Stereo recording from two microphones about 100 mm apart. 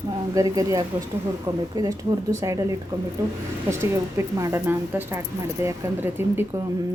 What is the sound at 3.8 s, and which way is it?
Speech, 25° right (ahead or behind).